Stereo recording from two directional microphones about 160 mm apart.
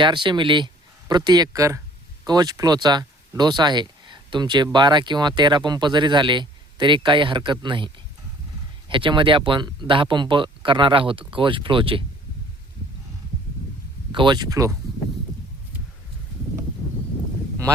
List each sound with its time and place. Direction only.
0.0 s speech: 30° right (ahead or behind)
8.9 s speech: 30° right (ahead or behind)
14.1 s speech: 30° right (ahead or behind)